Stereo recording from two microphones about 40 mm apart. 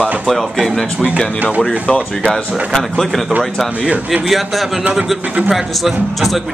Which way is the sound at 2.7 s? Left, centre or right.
Centre.